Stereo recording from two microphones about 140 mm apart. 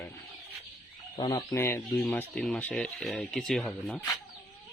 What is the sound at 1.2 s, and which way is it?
Fowl, 30° left (ahead or behind).